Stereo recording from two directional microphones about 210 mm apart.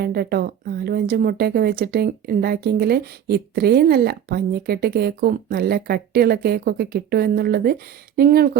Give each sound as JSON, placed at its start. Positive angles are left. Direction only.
{"t": 0.0, "sound": "speech", "side_deg": -50}